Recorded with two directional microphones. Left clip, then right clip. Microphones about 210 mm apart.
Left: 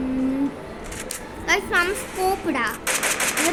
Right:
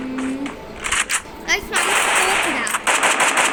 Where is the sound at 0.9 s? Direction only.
Centre (ahead or behind).